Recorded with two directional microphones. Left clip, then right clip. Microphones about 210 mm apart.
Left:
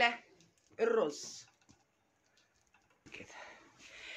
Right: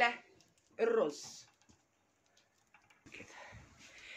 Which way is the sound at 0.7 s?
Centre (ahead or behind).